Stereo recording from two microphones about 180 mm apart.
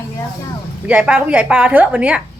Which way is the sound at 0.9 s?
5° right (ahead or behind).